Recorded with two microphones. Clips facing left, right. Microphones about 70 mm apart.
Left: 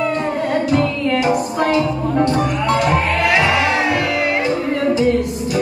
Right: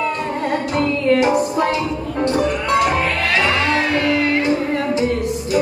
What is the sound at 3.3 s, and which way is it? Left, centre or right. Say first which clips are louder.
Music: right 1 dB; centre.